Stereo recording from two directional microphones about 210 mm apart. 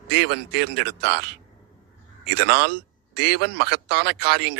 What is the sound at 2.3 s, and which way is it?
Speech, 55° right (ahead or behind).